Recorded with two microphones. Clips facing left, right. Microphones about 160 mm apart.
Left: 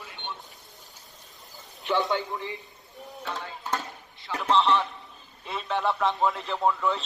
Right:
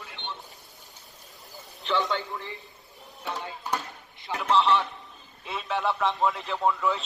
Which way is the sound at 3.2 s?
20° right (ahead or behind).